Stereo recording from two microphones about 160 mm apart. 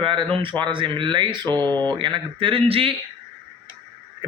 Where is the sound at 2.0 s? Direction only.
30° right (ahead or behind).